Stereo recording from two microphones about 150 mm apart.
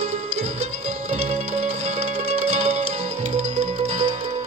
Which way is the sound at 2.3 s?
50° right (ahead or behind).